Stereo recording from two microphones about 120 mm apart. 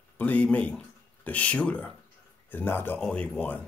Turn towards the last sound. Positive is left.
turn(degrees=15)  # may be behind; listen again after turning